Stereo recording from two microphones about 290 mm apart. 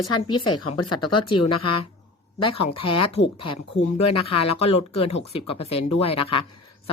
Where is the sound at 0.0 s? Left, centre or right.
Centre.